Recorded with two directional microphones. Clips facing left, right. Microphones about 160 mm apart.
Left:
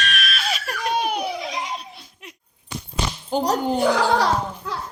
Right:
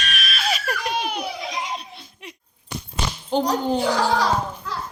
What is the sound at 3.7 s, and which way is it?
Speech, 55° left (ahead or behind).